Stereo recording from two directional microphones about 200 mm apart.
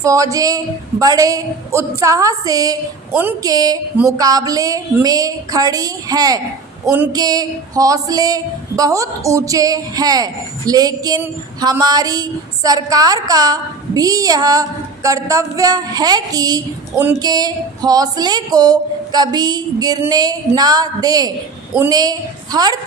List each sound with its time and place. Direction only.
0.0 s a woman's voice: 15° right (ahead or behind)